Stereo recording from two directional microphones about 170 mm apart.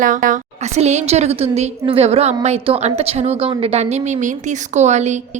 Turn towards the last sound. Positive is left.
turn(degrees=-45)  # may be behind; listen again after turning